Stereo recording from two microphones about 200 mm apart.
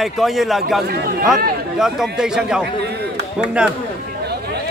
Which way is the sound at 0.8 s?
50° right (ahead or behind).